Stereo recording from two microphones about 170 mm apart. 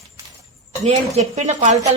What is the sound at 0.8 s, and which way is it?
Speech, 40° right (ahead or behind).